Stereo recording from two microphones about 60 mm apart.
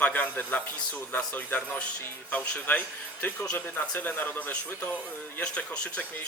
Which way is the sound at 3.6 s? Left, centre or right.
Left.